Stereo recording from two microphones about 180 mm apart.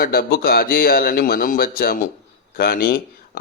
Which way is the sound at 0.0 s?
55° left (ahead or behind).